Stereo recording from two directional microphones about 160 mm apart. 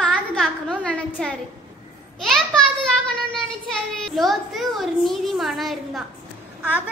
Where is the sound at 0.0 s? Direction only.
5° left (ahead or behind).